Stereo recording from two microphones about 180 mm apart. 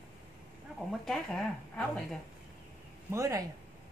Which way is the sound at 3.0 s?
15° right (ahead or behind).